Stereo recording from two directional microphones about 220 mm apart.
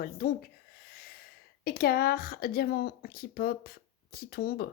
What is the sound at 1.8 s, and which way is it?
Speech, 45° left (ahead or behind).